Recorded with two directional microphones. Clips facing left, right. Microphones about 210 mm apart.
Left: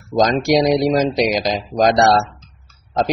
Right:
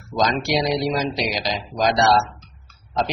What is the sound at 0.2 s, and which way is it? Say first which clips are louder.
Speech: left 6 dB; 45° left (ahead or behind).